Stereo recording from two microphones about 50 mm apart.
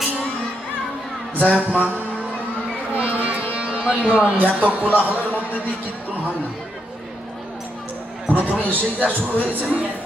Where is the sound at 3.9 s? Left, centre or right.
Right.